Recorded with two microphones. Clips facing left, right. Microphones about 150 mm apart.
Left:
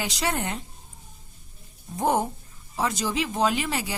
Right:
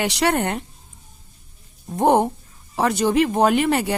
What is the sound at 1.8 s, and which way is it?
Speech, 60° right (ahead or behind).